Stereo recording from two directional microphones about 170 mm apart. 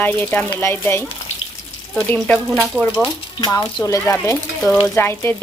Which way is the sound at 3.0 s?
25° left (ahead or behind).